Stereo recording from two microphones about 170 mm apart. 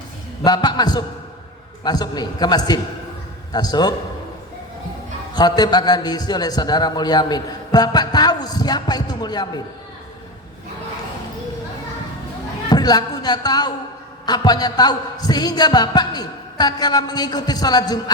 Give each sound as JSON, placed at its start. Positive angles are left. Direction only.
{"t": 0.4, "sound": "a man's voice", "side_deg": 25}
{"t": 5.3, "sound": "a man's voice", "side_deg": 25}
{"t": 12.6, "sound": "a man's voice", "side_deg": 25}